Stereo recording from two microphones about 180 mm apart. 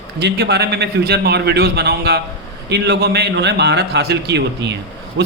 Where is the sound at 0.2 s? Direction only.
65° right (ahead or behind).